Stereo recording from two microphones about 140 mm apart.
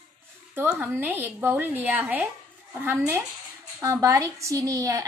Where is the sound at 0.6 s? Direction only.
15° right (ahead or behind).